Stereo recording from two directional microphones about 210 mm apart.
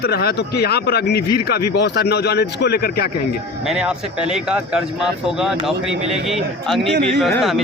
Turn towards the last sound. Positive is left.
turn(degrees=0)  # may be behind; listen again after turning